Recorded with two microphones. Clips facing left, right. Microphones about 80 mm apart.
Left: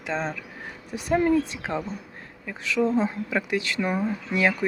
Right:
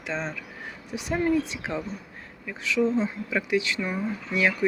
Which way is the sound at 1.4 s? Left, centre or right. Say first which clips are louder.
Left 2 dB; left.